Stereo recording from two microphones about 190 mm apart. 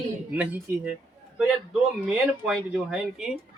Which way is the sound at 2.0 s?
5° right (ahead or behind).